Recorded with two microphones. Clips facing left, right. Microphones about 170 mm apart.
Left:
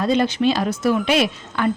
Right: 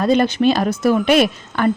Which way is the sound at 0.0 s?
50° right (ahead or behind).